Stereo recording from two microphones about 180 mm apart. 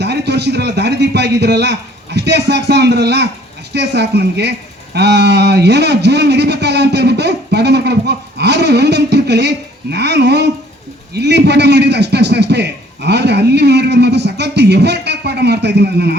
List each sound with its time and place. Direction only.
0.0 s a man's voice: 70° right (ahead or behind)